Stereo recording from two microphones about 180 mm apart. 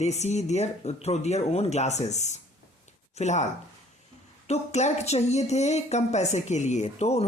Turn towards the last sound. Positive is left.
turn(degrees=35)  # may be behind; listen again after turning